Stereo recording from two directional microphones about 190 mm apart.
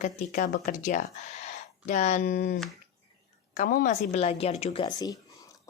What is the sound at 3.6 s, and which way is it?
Speech, 45° left (ahead or behind).